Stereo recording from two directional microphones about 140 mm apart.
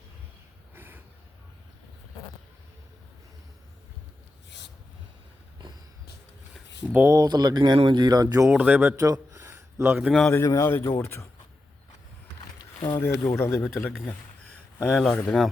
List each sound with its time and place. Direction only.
0.8 s a sound: 15° right (ahead or behind)
6.8 s speech: 10° right (ahead or behind)
7.1 s speech: 30° right (ahead or behind)
8.5 s speech: 10° right (ahead or behind)
9.0 s gasp: 25° right (ahead or behind)
10.0 s a man's voice: centre (ahead or behind)
10.3 s speech: 20° left (ahead or behind)
13.0 s speech: 15° left (ahead or behind)
14.0 s a sound: 10° left (ahead or behind)
14.8 s a man's voice: 5° left (ahead or behind)